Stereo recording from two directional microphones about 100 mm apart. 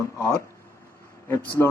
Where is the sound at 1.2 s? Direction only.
20° left (ahead or behind).